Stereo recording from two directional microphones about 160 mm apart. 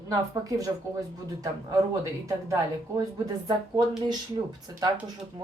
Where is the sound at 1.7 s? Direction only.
20° right (ahead or behind).